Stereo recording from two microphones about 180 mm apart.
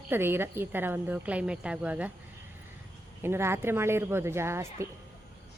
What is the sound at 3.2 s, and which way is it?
Speech, 15° right (ahead or behind).